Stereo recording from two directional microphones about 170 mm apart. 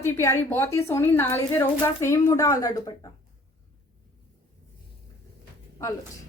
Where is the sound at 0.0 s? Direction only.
15° left (ahead or behind).